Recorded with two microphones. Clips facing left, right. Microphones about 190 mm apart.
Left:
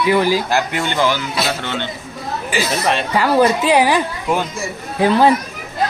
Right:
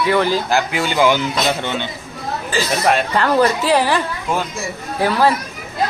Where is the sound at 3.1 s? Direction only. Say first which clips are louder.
Left 1 dB; 10° left (ahead or behind).